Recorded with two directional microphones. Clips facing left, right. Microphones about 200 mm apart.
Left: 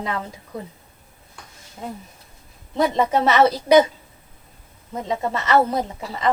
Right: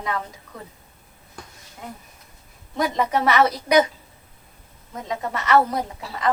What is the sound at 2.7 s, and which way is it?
A woman's voice, 25° left (ahead or behind).